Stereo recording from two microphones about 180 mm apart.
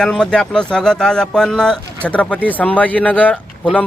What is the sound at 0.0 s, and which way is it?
Speech, 5° left (ahead or behind).